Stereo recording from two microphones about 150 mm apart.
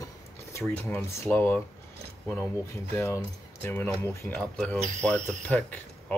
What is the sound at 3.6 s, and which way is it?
Speech, 15° left (ahead or behind).